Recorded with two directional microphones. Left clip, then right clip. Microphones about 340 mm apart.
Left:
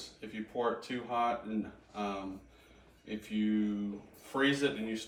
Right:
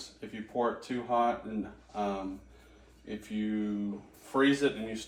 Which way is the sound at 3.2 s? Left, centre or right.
Centre.